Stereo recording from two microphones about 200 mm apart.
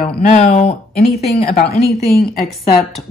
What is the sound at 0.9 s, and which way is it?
Speech, 50° left (ahead or behind).